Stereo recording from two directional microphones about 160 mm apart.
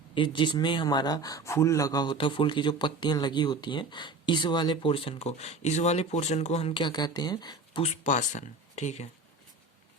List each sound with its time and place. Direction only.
0.1 s speech: 30° left (ahead or behind)
8.0 s speech: 50° left (ahead or behind)